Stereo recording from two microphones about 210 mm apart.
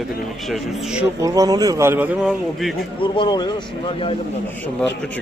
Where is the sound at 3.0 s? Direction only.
20° left (ahead or behind).